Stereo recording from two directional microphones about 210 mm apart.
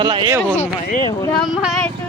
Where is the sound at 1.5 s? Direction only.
Centre (ahead or behind).